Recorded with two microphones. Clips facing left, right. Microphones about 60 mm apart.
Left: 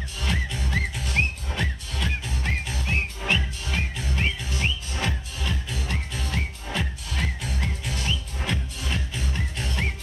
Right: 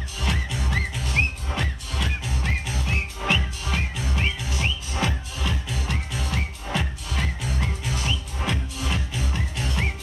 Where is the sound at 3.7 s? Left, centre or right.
Centre.